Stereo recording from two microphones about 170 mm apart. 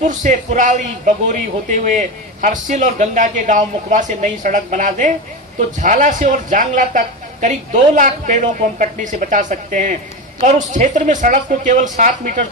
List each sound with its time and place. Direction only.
0.0 s a man's voice: 50° right (ahead or behind)